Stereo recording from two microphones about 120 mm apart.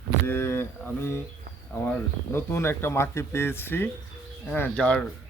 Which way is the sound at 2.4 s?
20° left (ahead or behind).